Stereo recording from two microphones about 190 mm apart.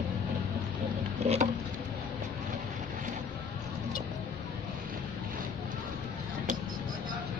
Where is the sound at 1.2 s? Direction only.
35° right (ahead or behind).